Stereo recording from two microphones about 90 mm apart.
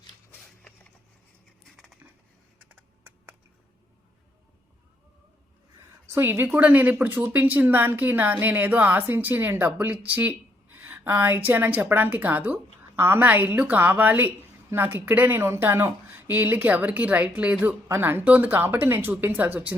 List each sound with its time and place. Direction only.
1.7 s crushing: centre (ahead or behind)
2.6 s computer keyboard: 20° right (ahead or behind)
6.1 s a woman's voice: 25° right (ahead or behind)
17.8 s a woman's voice: 25° right (ahead or behind)